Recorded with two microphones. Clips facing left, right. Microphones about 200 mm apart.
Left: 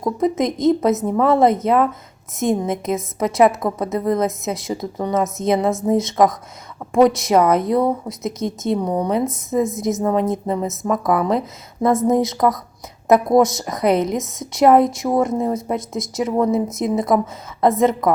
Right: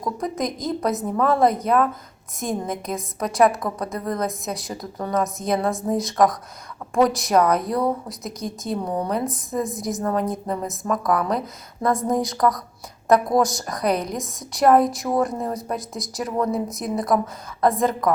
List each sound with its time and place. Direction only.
0.0 s a woman's voice: 25° left (ahead or behind)